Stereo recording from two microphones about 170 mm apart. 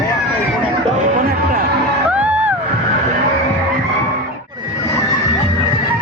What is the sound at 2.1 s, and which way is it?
Music, 5° right (ahead or behind).